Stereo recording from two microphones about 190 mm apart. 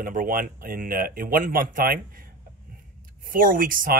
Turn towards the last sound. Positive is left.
turn(degrees=-45)  # may be behind; listen again after turning